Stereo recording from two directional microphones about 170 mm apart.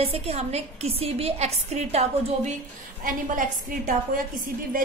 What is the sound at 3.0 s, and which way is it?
A woman's voice, 55° right (ahead or behind).